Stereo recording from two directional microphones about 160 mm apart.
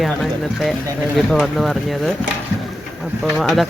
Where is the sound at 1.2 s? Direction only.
Centre (ahead or behind).